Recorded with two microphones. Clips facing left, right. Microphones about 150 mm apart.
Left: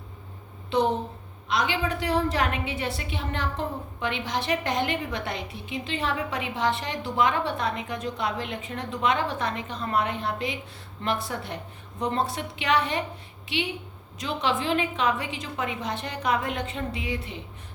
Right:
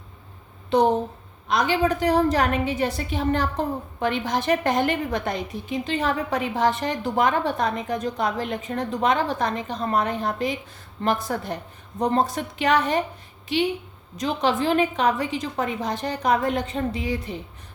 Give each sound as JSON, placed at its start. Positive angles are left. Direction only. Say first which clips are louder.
{"t": 0.7, "sound": "a woman's voice", "louder": "right 5 dB", "side_deg": -45}
{"t": 14.2, "sound": "a woman's voice", "louder": "right 5 dB", "side_deg": -40}